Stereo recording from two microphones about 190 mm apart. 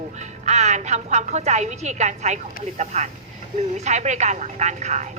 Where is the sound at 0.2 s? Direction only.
35° right (ahead or behind).